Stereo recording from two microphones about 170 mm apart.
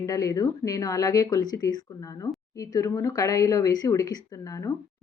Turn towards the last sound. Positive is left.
turn(degrees=20)  # may be behind; listen again after turning